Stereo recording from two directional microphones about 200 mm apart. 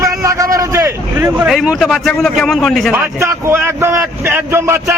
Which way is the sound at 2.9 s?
15° right (ahead or behind).